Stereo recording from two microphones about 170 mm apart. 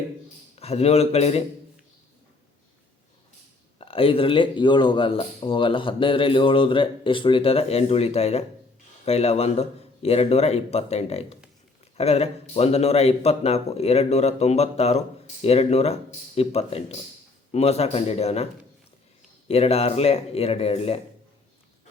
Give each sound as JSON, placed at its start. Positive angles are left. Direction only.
{"t": 0.6, "sound": "speech", "side_deg": 35}
{"t": 3.8, "sound": "speech", "side_deg": 30}
{"t": 19.5, "sound": "speech", "side_deg": 35}